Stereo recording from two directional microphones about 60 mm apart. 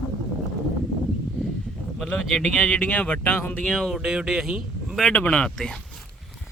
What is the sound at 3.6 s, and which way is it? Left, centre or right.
Speech, centre.